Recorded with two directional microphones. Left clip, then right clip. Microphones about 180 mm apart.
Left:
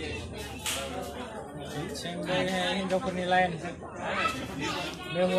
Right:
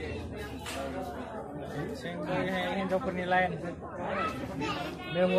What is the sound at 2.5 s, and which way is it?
Speech, 35° left (ahead or behind).